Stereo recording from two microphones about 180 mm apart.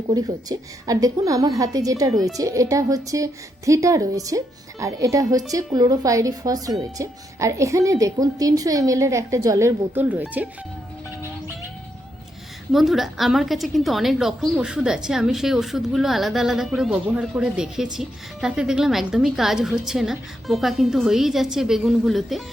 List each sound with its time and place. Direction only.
0.1 s a woman's voice: 20° right (ahead or behind)
12.7 s a woman's voice: centre (ahead or behind)